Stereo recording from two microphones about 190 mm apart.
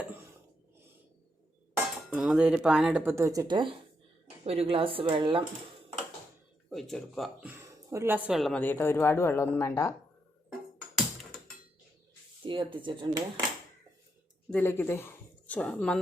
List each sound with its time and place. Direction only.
1.7 s speech: 5° right (ahead or behind); by 5.4 s 25° right (ahead or behind)
6.7 s speech: centre (ahead or behind)
7.4 s speech: 10° right (ahead or behind); by 9.9 s 15° left (ahead or behind)
10.8 s music: centre (ahead or behind)
12.5 s speech: 25° right (ahead or behind)
14.5 s a woman's voice: 10° left (ahead or behind)